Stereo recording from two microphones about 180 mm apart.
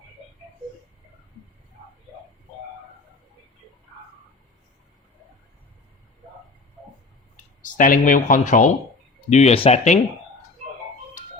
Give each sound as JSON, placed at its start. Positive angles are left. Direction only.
{"t": 7.6, "sound": "speech", "side_deg": 45}